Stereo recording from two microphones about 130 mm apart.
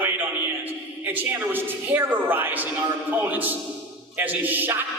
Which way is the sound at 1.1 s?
15° right (ahead or behind).